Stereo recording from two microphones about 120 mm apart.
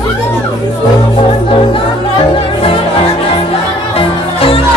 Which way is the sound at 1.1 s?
50° left (ahead or behind).